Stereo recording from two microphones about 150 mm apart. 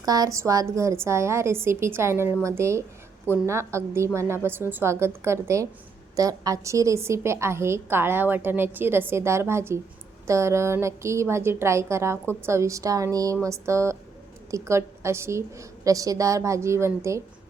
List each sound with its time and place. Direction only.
0.0 s a woman's voice: 25° right (ahead or behind)